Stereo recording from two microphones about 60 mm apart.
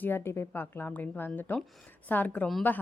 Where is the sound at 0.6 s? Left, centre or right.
Left.